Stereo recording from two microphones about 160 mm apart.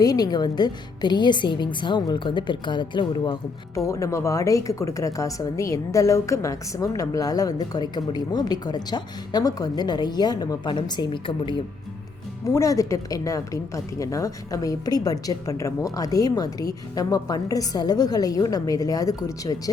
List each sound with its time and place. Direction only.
0.0 s a woman's voice: 25° left (ahead or behind)
12.5 s a woman's voice: 20° left (ahead or behind)